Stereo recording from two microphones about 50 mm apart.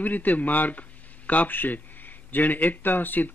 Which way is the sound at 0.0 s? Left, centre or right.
Left.